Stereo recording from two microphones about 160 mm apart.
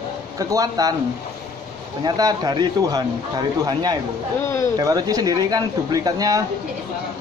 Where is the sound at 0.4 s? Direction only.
20° right (ahead or behind).